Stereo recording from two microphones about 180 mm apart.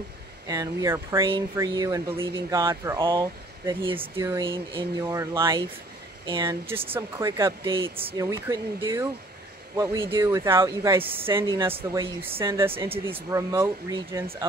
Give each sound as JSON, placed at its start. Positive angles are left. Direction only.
{"t": 0.5, "sound": "speech", "side_deg": -20}
{"t": 5.0, "sound": "speech", "side_deg": -15}
{"t": 6.7, "sound": "speech", "side_deg": -15}
{"t": 7.6, "sound": "speech", "side_deg": -30}
{"t": 10.1, "sound": "speech", "side_deg": -15}